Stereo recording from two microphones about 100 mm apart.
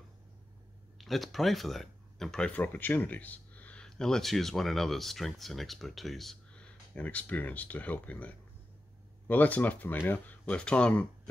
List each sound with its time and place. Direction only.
0.9 s speech: centre (ahead or behind)